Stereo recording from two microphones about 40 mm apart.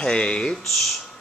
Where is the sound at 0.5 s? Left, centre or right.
Centre.